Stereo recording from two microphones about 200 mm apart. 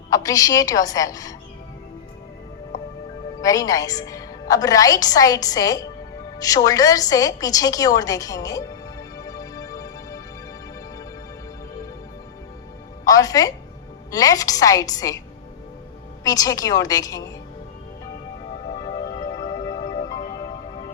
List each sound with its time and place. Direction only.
0.1 s a woman's voice: 15° left (ahead or behind)
3.4 s a woman's voice: 15° left (ahead or behind)
9.1 s music: 15° left (ahead or behind)
13.1 s a woman's voice: 15° left (ahead or behind)
16.2 s a woman's voice: 15° left (ahead or behind)
19.3 s music: 20° left (ahead or behind)